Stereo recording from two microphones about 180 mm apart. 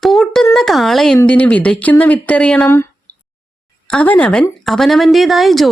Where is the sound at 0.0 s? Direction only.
Centre (ahead or behind).